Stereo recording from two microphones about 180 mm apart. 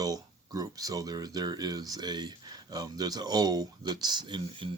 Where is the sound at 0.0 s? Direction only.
20° right (ahead or behind).